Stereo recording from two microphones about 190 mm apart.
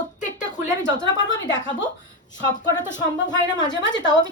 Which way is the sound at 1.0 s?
20° left (ahead or behind).